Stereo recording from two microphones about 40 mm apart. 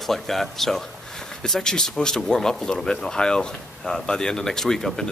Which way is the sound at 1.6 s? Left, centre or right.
Centre.